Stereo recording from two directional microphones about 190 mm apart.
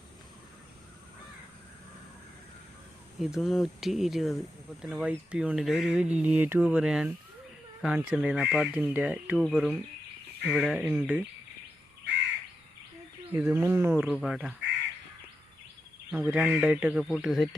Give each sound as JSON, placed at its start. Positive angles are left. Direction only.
{"t": 3.2, "sound": "speech", "side_deg": 0}
{"t": 13.3, "sound": "speech", "side_deg": -15}
{"t": 14.1, "sound": "speech", "side_deg": 0}
{"t": 16.3, "sound": "speech", "side_deg": -10}